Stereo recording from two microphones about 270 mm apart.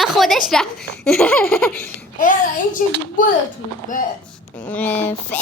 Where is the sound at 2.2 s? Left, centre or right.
Left.